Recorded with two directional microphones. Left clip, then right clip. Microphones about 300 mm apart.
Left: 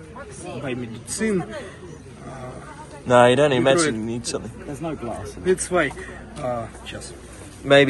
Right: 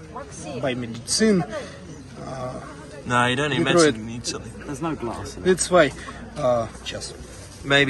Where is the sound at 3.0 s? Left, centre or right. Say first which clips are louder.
Left 7 dB; centre.